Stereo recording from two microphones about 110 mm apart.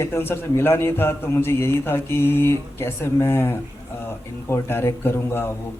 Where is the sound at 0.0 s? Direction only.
20° left (ahead or behind).